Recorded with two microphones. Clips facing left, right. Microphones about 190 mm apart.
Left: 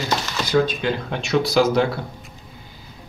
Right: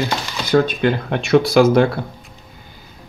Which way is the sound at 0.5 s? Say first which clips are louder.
Right 4 dB; 55° right (ahead or behind).